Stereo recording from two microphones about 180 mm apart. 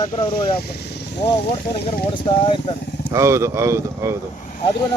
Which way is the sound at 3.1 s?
15° right (ahead or behind).